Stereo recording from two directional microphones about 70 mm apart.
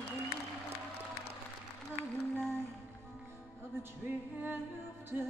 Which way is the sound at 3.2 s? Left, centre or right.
Right.